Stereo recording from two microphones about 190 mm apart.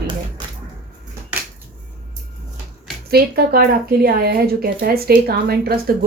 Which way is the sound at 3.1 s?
55° right (ahead or behind).